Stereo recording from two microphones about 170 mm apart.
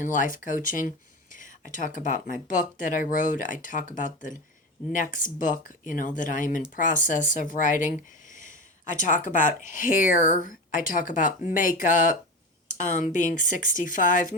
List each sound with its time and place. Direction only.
0.0 s speech: 50° left (ahead or behind)